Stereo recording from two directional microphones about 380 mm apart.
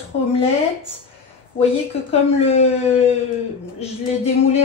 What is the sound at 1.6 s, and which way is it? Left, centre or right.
A woman's voice, centre.